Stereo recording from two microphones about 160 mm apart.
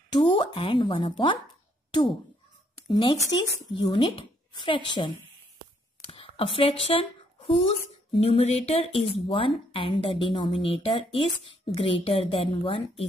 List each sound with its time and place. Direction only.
0.1 s a woman's voice: 30° left (ahead or behind)
2.9 s a woman's voice: 25° left (ahead or behind)
5.9 s a sound: 35° left (ahead or behind)
8.2 s a woman's voice: 40° left (ahead or behind)